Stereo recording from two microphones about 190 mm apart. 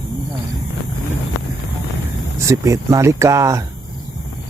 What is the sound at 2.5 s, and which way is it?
Speech, 15° right (ahead or behind).